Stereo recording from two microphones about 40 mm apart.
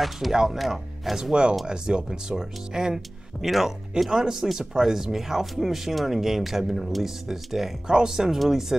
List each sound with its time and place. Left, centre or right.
0.3 s speech: centre
1.1 s speech: centre